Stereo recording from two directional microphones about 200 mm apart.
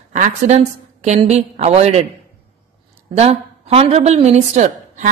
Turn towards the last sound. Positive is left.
turn(degrees=-35)  # may be behind; listen again after turning